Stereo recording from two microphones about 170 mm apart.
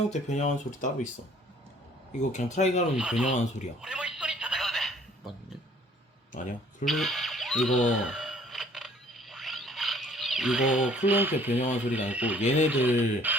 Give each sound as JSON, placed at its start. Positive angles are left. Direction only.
{"t": 0.1, "sound": "speech", "side_deg": 45}
{"t": 2.1, "sound": "speech", "side_deg": 45}
{"t": 3.0, "sound": "speech", "side_deg": -5}
{"t": 3.8, "sound": "telephone", "side_deg": -5}
{"t": 6.3, "sound": "speech", "side_deg": 50}
{"t": 6.8, "sound": "a sound", "side_deg": 0}
{"t": 11.8, "sound": "speech", "side_deg": -10}